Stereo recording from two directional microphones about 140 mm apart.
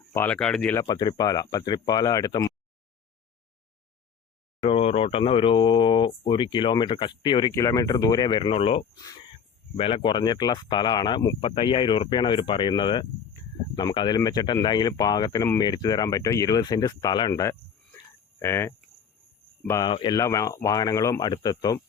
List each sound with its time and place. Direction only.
0.1 s speech: 10° left (ahead or behind)
0.8 s speech: 30° left (ahead or behind)
4.6 s speech: 45° left (ahead or behind)
7.5 s speech: 20° left (ahead or behind); by 8.9 s 45° left (ahead or behind)
9.0 s cricket: 25° left (ahead or behind)
9.7 s speech: 40° left (ahead or behind)
11.3 s speech: 40° left (ahead or behind); by 17.6 s 25° left (ahead or behind)
18.3 s cricket: 20° left (ahead or behind)
19.6 s speech: 20° left (ahead or behind)
19.9 s speech: 30° left (ahead or behind)